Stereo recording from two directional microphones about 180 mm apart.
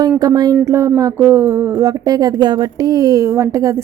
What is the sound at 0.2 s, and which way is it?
A woman's voice, 20° right (ahead or behind).